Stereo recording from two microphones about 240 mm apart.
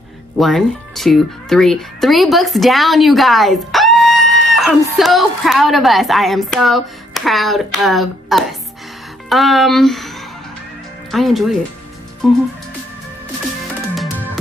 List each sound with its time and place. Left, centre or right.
0.4 s a woman's voice: centre
13.9 s music: centre